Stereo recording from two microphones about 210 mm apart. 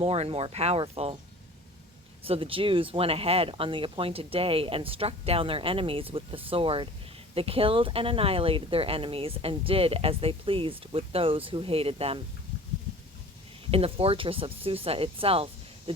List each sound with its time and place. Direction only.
0.0 s speech: 30° right (ahead or behind)
2.2 s speech: 25° right (ahead or behind)
13.7 s speech: 25° right (ahead or behind)